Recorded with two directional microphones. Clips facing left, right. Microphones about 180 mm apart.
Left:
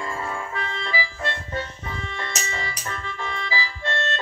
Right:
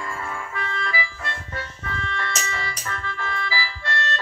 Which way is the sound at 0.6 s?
25° left (ahead or behind).